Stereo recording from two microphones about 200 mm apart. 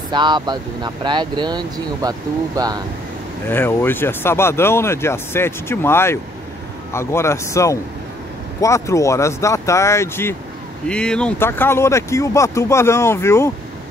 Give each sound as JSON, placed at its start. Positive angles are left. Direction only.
{"t": 0.1, "sound": "speech", "side_deg": -25}
{"t": 3.4, "sound": "speech", "side_deg": 10}